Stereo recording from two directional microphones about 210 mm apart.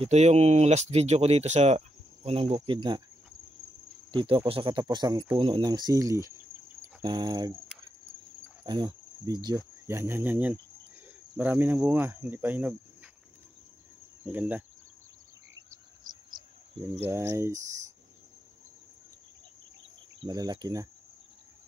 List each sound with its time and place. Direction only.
0.0 s speech: 30° right (ahead or behind)
4.1 s speech: 20° right (ahead or behind)
8.6 s cricket: 20° right (ahead or behind)
11.3 s speech: 10° right (ahead or behind)
14.2 s speech: 5° right (ahead or behind)
15.7 s cricket: 20° right (ahead or behind)
16.7 s speech: 30° right (ahead or behind)
17.0 s speech: 15° right (ahead or behind)
20.2 s speech: 20° right (ahead or behind)